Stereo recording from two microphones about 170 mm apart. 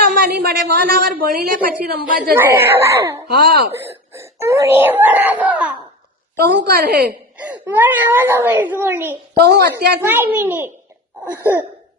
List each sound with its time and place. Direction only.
0.2 s a woman's voice: 65° right (ahead or behind)
2.3 s speech: 15° right (ahead or behind)
3.3 s speech: 70° right (ahead or behind)
4.2 s speech: 15° right (ahead or behind)
6.4 s a woman's voice: 70° right (ahead or behind)
7.3 s speech: 10° right (ahead or behind)
9.3 s a woman's voice: 70° right (ahead or behind)
10.0 s speech: 10° right (ahead or behind)